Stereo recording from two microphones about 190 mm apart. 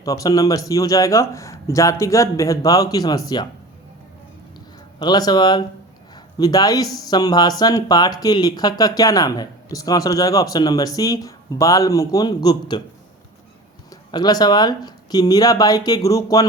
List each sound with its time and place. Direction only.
0.0 s speech: 20° left (ahead or behind)
4.9 s speech: 20° left (ahead or behind)
13.9 s speech: 20° left (ahead or behind)